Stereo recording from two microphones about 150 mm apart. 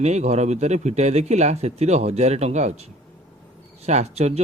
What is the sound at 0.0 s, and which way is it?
Speech, 45° right (ahead or behind).